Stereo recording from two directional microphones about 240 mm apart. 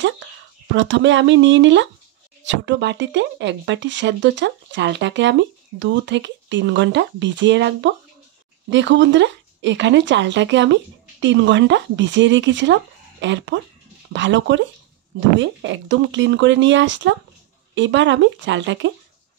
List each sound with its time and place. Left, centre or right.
0.7 s speech: right